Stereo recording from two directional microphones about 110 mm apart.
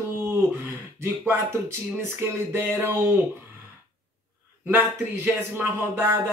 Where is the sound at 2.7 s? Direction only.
25° right (ahead or behind).